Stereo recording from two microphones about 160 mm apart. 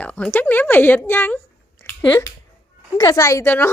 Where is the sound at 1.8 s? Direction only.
20° left (ahead or behind).